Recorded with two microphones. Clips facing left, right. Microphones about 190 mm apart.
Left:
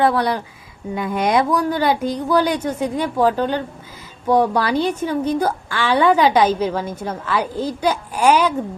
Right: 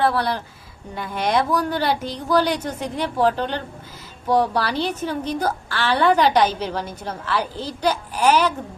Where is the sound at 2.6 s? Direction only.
10° left (ahead or behind).